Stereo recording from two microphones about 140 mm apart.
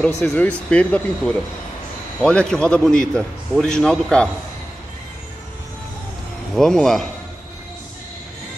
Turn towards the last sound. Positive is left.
turn(degrees=0)  # may be behind; listen again after turning